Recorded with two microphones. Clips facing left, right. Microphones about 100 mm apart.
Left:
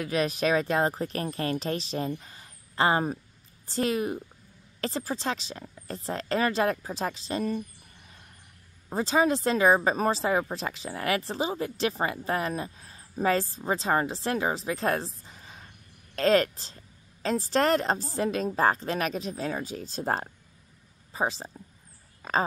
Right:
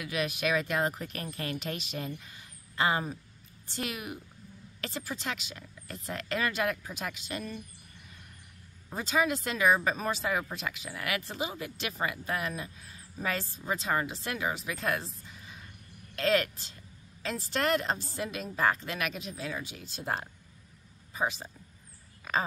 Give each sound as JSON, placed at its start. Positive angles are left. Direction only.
{"t": 0.0, "sound": "a woman's voice", "side_deg": 35}
{"t": 8.9, "sound": "a woman's voice", "side_deg": 35}
{"t": 15.2, "sound": "a sound", "side_deg": 35}
{"t": 16.2, "sound": "a woman's voice", "side_deg": 35}